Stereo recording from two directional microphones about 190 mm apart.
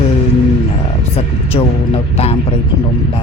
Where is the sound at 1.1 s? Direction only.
30° left (ahead or behind).